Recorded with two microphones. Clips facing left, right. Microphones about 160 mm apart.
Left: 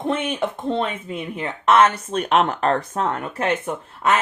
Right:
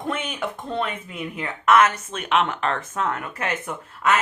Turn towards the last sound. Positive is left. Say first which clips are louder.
# left 2 dB
turn(degrees=25)  # may be behind; listen again after turning